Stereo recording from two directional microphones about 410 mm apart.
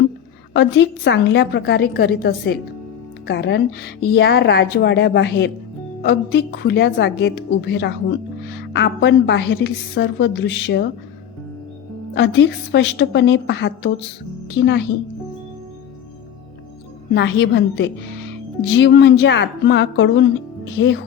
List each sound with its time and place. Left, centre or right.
0.5 s a woman's voice: left
12.1 s a woman's voice: left
17.2 s a woman's voice: left